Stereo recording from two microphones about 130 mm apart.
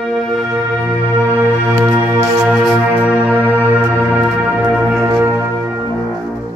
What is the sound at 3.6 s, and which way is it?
Music, 15° right (ahead or behind).